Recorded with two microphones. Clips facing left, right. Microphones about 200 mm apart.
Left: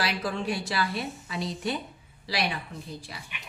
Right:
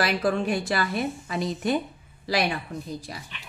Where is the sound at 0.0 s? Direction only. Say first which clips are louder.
Right 6 dB; 50° right (ahead or behind).